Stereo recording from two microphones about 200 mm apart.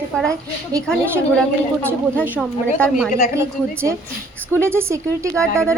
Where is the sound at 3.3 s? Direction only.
15° right (ahead or behind).